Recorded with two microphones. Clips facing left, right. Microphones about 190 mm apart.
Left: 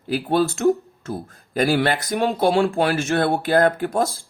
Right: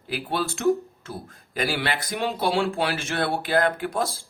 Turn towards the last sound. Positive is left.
turn(degrees=45)  # may be behind; listen again after turning